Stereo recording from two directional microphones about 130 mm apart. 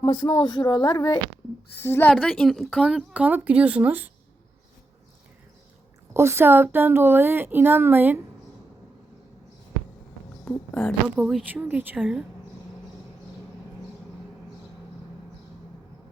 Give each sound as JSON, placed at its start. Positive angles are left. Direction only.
{"t": 0.0, "sound": "speech", "side_deg": 40}
{"t": 1.8, "sound": "speech", "side_deg": 15}
{"t": 6.1, "sound": "speech", "side_deg": -20}
{"t": 10.4, "sound": "speech", "side_deg": 15}
{"t": 11.2, "sound": "speech", "side_deg": 0}
{"t": 11.4, "sound": "speech", "side_deg": -15}
{"t": 11.9, "sound": "speech", "side_deg": 0}